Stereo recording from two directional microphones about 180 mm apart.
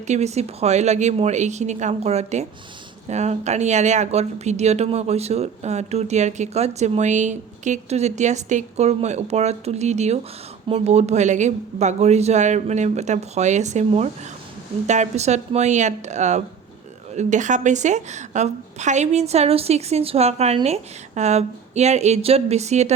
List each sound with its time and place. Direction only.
0.1 s speech: 40° right (ahead or behind)